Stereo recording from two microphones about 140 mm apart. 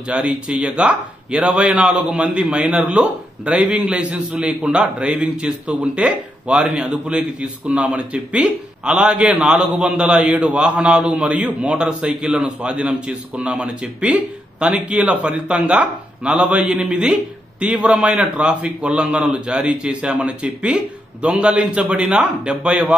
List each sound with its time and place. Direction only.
0.0 s a man's voice: 10° right (ahead or behind)